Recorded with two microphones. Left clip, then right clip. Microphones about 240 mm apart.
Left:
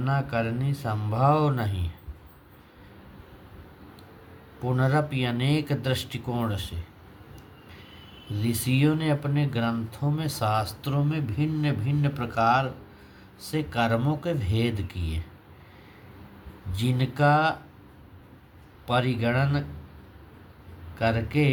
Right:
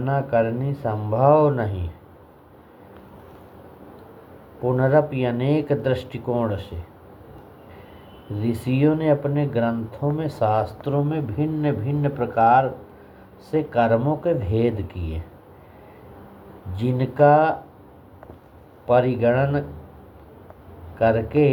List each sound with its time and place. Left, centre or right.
0.0 s speech: left
4.8 s speech: left
8.4 s speech: left
16.7 s speech: left
18.9 s speech: left
21.0 s speech: left